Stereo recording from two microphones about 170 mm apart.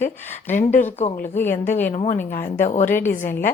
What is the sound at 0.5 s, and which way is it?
Speech, 45° left (ahead or behind).